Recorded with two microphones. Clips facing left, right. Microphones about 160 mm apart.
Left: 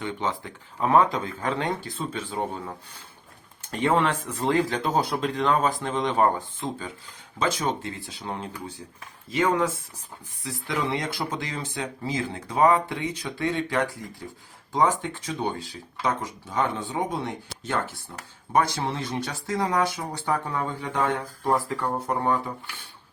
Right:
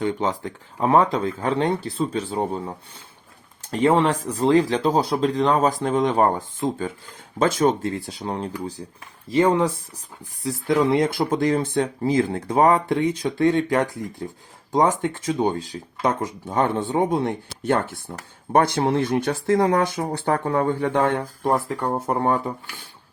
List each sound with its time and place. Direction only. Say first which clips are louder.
0.0 s speech: right 6 dB; 40° right (ahead or behind)
3.7 s speech: right 5 dB; 35° right (ahead or behind)
8.2 s speech: right 4 dB; 35° right (ahead or behind); by 12.4 s 55° right (ahead or behind)
12.5 s speech: right 3 dB; 45° right (ahead or behind)
21.4 s speech: right 2 dB; 25° right (ahead or behind)
21.9 s speech: right 4 dB; 40° right (ahead or behind)